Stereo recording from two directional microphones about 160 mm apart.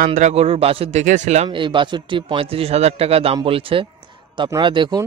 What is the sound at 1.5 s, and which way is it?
Speech, 30° right (ahead or behind).